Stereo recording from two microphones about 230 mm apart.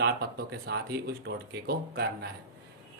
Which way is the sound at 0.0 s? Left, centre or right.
Right.